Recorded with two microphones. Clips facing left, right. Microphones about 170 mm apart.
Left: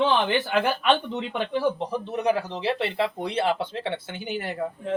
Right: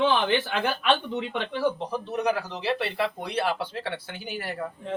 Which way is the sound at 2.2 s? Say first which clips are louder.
Left 4 dB; 25° left (ahead or behind).